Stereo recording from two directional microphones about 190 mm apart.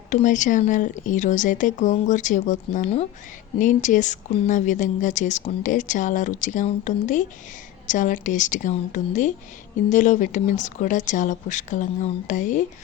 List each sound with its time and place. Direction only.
0.1 s speech: 40° left (ahead or behind)